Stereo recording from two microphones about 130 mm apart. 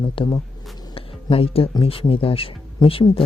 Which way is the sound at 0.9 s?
45° left (ahead or behind).